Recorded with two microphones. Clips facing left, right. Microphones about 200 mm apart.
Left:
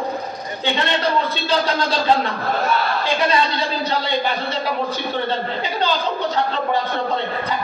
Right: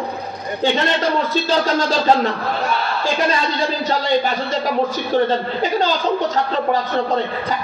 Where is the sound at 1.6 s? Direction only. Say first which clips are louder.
Right 3 dB; 45° right (ahead or behind).